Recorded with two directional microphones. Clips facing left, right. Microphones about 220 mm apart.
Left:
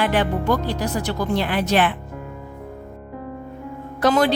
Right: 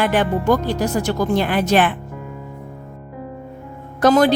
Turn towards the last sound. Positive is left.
turn(degrees=-45)  # may be behind; listen again after turning